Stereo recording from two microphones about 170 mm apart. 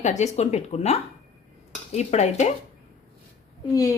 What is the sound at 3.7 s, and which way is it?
Speech, 20° left (ahead or behind).